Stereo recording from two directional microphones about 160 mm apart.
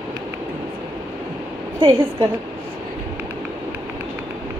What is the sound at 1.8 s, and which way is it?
Speech, 35° right (ahead or behind).